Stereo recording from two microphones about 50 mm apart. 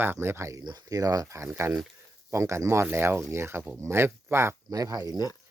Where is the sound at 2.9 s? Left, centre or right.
Right.